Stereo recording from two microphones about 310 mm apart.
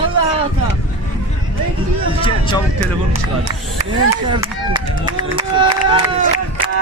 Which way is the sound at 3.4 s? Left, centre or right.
Centre.